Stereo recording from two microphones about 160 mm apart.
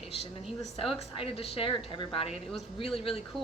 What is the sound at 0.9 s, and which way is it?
A woman's voice, 35° left (ahead or behind).